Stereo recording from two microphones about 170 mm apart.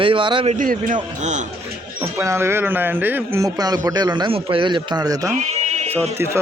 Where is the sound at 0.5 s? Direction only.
55° right (ahead or behind).